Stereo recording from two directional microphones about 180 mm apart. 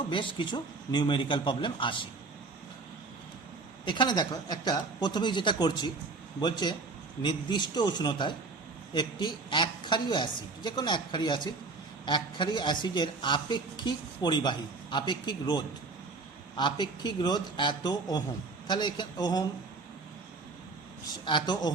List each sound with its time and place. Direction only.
0.1 s speech: 25° left (ahead or behind)
3.8 s speech: 25° left (ahead or behind)
21.2 s speech: 25° left (ahead or behind)